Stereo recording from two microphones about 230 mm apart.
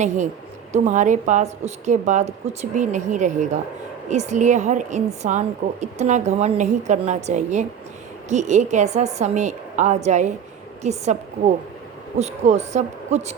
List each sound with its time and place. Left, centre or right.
0.7 s a woman's voice: right